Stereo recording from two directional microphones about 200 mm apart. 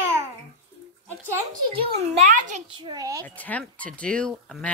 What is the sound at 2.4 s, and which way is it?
Speech, 40° right (ahead or behind).